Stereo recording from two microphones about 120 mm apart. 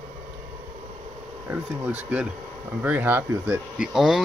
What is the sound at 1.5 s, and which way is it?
Speech, 15° right (ahead or behind).